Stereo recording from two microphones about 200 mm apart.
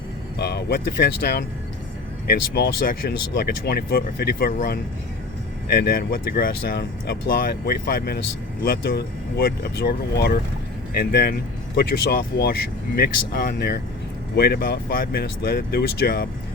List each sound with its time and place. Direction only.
0.3 s speech: 55° left (ahead or behind)